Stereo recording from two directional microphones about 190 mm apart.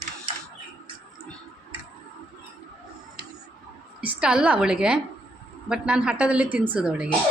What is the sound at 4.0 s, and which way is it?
A woman's voice, 5° right (ahead or behind).